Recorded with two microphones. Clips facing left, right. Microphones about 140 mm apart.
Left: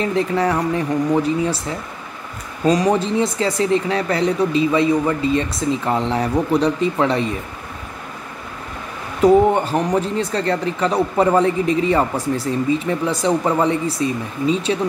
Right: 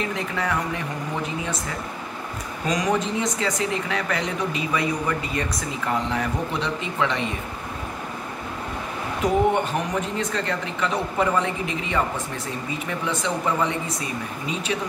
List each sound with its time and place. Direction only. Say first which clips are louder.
0.0 s speech: left 8 dB; 35° left (ahead or behind)
2.6 s speech: left 7 dB; 35° left (ahead or behind)
9.2 s speech: left 8 dB; 35° left (ahead or behind)